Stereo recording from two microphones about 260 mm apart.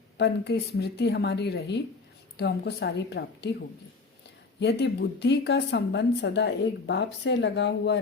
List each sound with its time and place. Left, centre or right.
0.2 s speech: left
4.6 s speech: left